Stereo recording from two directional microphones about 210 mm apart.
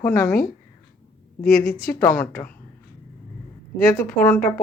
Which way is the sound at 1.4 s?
45° left (ahead or behind).